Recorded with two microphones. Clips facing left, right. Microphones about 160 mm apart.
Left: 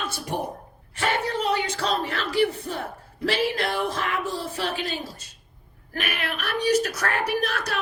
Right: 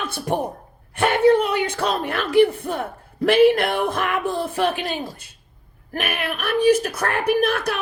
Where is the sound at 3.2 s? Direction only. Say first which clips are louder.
Right 10 dB; 55° right (ahead or behind).